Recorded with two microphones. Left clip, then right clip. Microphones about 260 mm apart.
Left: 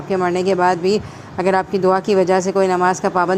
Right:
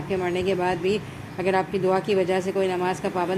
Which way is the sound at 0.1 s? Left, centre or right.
Centre.